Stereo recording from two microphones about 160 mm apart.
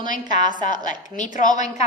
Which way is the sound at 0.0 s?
55° left (ahead or behind).